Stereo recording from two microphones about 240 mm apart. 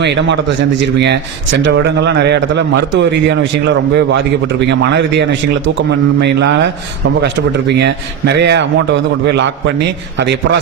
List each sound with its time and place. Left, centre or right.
0.0 s a man's voice: right
4.7 s a man's voice: right